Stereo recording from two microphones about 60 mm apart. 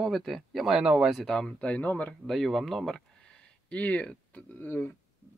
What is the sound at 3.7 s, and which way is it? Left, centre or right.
Speech, left.